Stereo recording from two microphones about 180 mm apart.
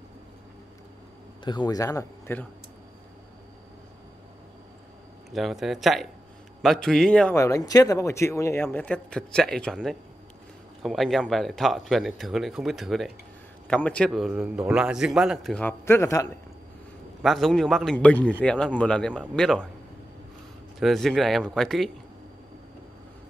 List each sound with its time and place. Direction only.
1.4 s speech: 25° left (ahead or behind)
5.3 s a man's voice: centre (ahead or behind)
7.3 s a man's voice: 15° left (ahead or behind)
17.2 s a man's voice: centre (ahead or behind)
20.8 s a man's voice: centre (ahead or behind)